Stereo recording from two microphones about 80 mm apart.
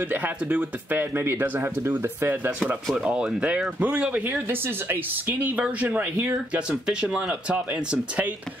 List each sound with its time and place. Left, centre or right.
0.1 s speech: centre
3.0 s speech: centre
6.9 s speech: centre